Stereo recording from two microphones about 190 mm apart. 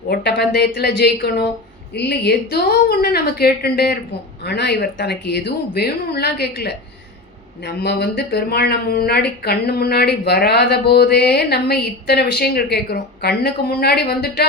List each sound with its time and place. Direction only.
0.1 s speech: 60° left (ahead or behind)